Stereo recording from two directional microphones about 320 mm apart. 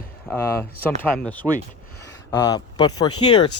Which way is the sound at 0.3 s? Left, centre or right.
Centre.